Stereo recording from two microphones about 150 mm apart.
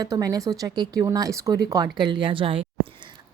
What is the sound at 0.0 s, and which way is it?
A woman's voice, 25° right (ahead or behind).